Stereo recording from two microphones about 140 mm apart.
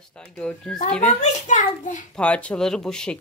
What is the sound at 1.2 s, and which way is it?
Speech, 60° left (ahead or behind).